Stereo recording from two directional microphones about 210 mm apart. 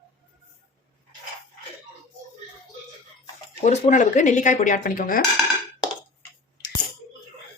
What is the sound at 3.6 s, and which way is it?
Speech, 35° left (ahead or behind).